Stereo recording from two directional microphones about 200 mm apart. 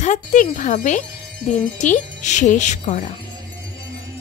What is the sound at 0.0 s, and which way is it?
Speech, 40° left (ahead or behind).